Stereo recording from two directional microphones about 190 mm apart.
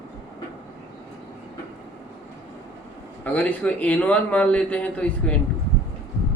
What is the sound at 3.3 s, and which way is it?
A man's voice, 10° left (ahead or behind).